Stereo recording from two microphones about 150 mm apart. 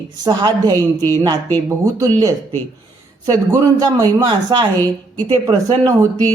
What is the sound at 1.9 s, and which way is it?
Speech, 25° right (ahead or behind).